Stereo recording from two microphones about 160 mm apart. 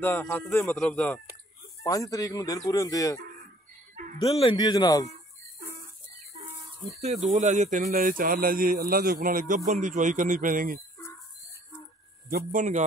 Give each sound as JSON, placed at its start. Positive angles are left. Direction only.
{"t": 0.3, "sound": "speech", "side_deg": 10}
{"t": 1.8, "sound": "speech", "side_deg": 20}
{"t": 3.9, "sound": "music", "side_deg": -50}
{"t": 4.2, "sound": "speech", "side_deg": 35}
{"t": 7.2, "sound": "speech", "side_deg": -50}
{"t": 12.3, "sound": "speech", "side_deg": -65}